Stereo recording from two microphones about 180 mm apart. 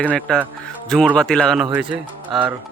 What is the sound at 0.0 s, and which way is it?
A man's voice, 5° left (ahead or behind).